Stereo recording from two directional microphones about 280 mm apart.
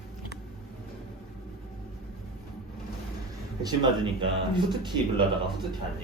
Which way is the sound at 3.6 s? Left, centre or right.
Centre.